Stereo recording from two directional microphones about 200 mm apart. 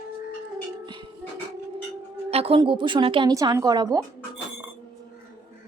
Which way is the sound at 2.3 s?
30° right (ahead or behind).